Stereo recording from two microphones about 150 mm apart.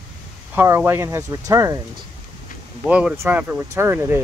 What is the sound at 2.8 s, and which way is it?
Speech, 10° right (ahead or behind).